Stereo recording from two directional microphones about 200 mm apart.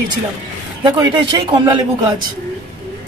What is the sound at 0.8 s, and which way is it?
Speech, 25° right (ahead or behind).